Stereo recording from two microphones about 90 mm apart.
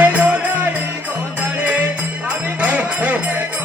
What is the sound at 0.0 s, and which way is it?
Music, 20° right (ahead or behind).